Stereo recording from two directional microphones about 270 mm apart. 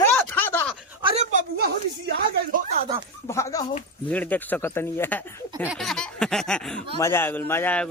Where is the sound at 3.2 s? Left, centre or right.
Centre.